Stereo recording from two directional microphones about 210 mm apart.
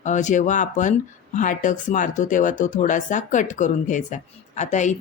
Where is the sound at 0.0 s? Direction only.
35° left (ahead or behind).